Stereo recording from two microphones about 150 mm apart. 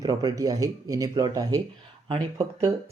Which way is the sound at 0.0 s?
25° right (ahead or behind).